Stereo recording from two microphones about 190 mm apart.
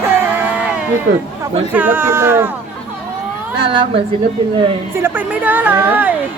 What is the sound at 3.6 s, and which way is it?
Speech, 25° right (ahead or behind).